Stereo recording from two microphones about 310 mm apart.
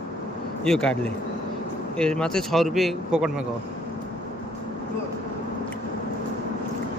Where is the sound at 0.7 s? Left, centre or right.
Centre.